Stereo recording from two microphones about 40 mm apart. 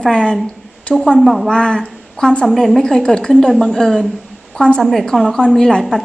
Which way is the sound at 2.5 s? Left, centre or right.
Centre.